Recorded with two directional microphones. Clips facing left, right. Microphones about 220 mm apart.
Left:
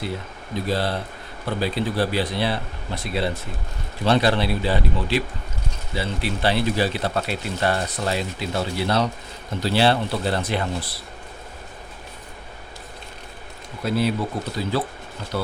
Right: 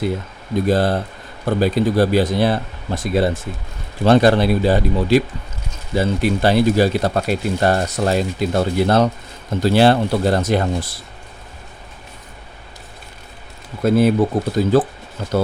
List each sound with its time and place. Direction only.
0.5 s speech: 45° right (ahead or behind)
13.8 s speech: 50° right (ahead or behind)